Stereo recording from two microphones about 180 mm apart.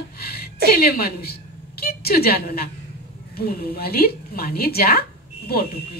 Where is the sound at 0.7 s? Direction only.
55° left (ahead or behind).